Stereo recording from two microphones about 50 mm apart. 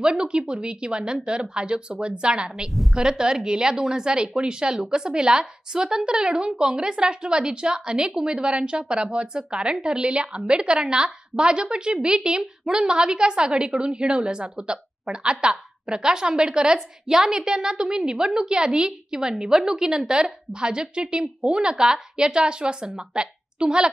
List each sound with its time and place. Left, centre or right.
0.0 s speech: centre
2.7 s a woman's voice: centre
3.0 s a woman's voice: centre